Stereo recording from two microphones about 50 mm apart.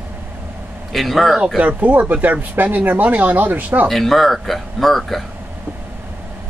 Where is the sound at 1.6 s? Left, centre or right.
Right.